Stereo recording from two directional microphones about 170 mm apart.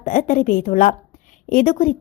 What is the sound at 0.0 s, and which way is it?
A woman's voice, 55° left (ahead or behind).